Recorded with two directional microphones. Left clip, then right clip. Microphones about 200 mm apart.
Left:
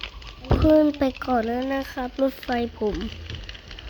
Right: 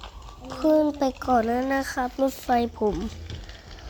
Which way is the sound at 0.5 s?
25° left (ahead or behind).